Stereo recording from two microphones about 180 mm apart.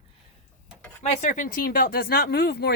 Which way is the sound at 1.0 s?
45° left (ahead or behind).